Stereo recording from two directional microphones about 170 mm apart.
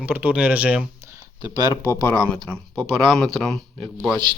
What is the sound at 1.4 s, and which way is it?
Speech, 25° left (ahead or behind).